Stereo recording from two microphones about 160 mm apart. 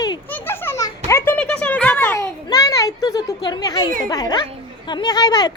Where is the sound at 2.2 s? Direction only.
25° left (ahead or behind).